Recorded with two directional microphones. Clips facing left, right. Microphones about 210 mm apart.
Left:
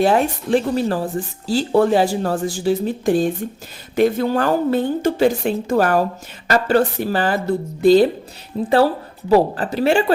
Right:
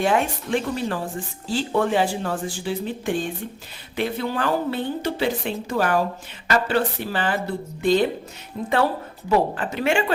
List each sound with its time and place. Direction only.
0.0 s a woman's voice: 35° left (ahead or behind)
9.3 s speech: 35° left (ahead or behind)